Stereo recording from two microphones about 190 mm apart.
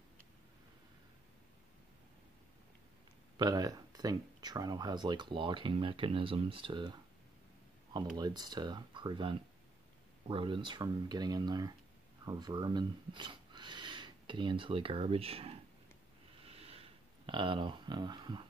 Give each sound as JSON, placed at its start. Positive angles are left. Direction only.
{"t": 3.3, "sound": "speech", "side_deg": -20}
{"t": 16.4, "sound": "snort", "side_deg": -30}
{"t": 17.3, "sound": "speech", "side_deg": -25}